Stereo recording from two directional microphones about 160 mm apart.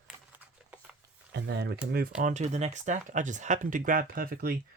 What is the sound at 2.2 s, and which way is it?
Speech, 50° right (ahead or behind).